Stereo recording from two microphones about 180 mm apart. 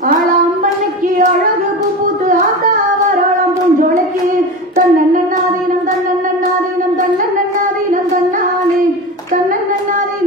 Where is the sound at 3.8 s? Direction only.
50° right (ahead or behind).